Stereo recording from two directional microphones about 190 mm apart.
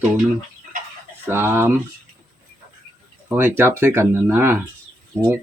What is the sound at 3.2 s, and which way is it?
Speech, 10° right (ahead or behind).